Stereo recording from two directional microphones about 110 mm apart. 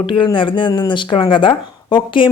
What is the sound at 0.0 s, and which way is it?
A woman's voice, 50° left (ahead or behind).